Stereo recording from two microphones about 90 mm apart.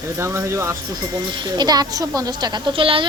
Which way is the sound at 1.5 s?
50° right (ahead or behind).